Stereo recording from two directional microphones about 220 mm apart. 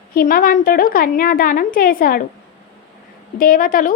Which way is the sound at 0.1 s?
40° left (ahead or behind).